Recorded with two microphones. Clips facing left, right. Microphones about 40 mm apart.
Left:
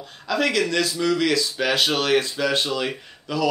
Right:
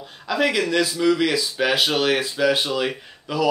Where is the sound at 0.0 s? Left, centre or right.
Centre.